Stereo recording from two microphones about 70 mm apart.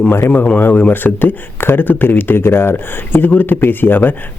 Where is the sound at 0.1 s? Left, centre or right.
Left.